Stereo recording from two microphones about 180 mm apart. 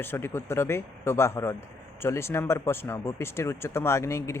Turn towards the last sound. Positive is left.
turn(degrees=15)  # may be behind; listen again after turning